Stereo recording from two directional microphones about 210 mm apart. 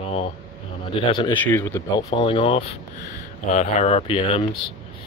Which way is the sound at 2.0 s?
20° left (ahead or behind).